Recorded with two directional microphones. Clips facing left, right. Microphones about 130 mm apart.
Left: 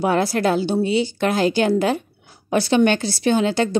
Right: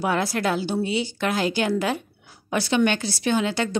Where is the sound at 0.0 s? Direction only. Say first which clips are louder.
Left 5 dB; 30° left (ahead or behind).